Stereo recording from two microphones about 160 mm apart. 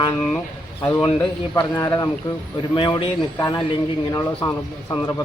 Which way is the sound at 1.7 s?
20° left (ahead or behind).